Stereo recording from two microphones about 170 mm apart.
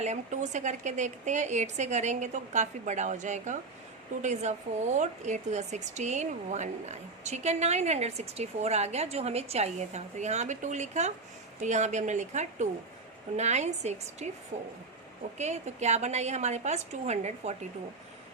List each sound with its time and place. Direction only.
0.0 s a woman's voice: 45° right (ahead or behind)